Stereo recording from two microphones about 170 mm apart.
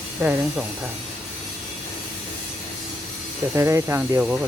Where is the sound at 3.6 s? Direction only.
15° right (ahead or behind).